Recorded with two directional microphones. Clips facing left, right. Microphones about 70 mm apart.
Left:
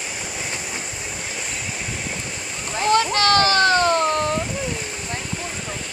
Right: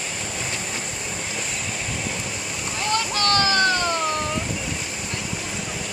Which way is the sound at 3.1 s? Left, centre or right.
Left.